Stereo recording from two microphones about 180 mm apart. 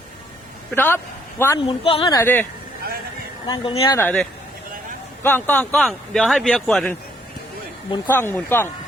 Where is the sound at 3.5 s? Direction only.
30° left (ahead or behind).